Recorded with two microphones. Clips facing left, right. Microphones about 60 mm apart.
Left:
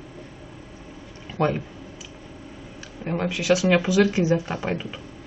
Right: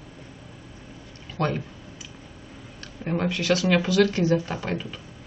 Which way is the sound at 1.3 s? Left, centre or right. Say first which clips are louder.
Left 3 dB; centre.